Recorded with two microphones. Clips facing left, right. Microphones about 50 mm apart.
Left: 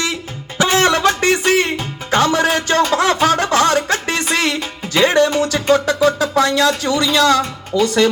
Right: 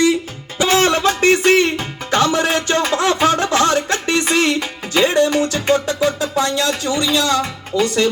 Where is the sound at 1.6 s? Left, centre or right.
Left.